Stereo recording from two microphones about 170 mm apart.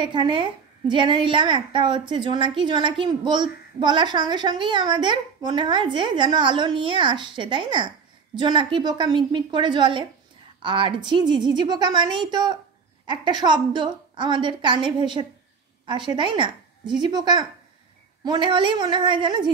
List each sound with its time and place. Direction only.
0.0 s a woman's voice: 30° right (ahead or behind)